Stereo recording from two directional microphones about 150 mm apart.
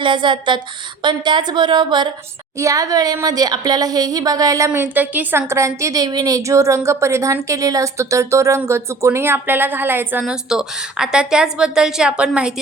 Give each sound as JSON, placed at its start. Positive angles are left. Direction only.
{"t": 0.0, "sound": "a woman's voice", "side_deg": -30}